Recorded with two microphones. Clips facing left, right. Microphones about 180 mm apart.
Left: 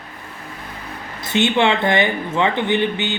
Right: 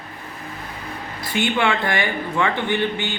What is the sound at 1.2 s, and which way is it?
Speech, 20° left (ahead or behind).